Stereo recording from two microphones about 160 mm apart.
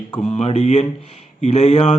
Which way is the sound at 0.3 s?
45° left (ahead or behind).